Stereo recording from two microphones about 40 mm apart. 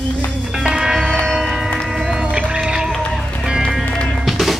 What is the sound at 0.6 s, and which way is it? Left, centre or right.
Music, centre.